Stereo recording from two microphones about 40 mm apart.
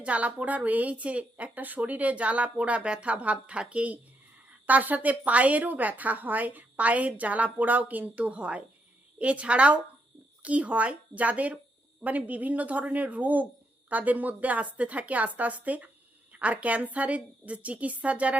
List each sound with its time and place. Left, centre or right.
0.0 s a woman's voice: right